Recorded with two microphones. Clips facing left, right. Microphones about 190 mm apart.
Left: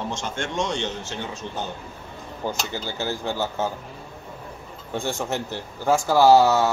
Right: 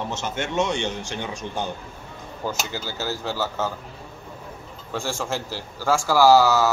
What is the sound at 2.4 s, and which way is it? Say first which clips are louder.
A man's voice: left 1 dB; 20° left (ahead or behind).